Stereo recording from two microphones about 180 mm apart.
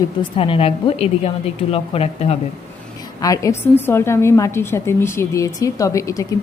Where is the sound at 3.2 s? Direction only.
20° left (ahead or behind).